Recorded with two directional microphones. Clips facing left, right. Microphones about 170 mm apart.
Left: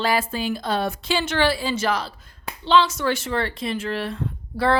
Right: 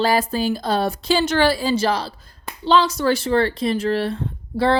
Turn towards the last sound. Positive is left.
turn(degrees=-25)  # may be behind; listen again after turning